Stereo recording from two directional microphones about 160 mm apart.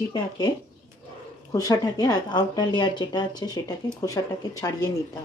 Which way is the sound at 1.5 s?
20° left (ahead or behind).